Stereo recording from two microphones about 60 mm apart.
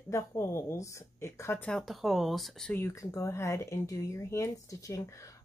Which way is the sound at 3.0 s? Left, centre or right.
Left.